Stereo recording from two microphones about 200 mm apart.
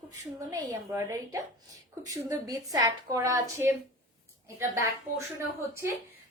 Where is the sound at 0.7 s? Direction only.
15° right (ahead or behind).